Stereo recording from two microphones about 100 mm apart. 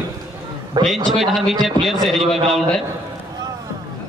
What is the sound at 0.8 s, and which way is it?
Speech, 45° right (ahead or behind).